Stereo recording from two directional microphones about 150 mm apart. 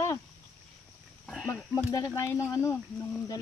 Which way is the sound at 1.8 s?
20° left (ahead or behind).